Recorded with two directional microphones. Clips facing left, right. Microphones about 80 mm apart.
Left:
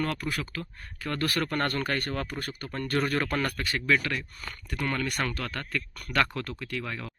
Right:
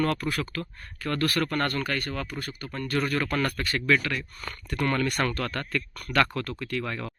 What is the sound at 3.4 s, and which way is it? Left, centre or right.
Speech, centre.